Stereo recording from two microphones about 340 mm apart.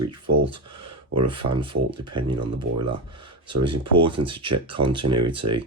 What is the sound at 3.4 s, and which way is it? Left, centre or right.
Speech, centre.